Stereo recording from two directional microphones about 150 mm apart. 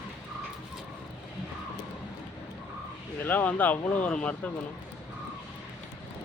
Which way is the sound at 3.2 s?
10° left (ahead or behind).